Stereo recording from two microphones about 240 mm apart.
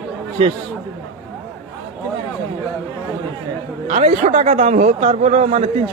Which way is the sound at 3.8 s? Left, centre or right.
Right.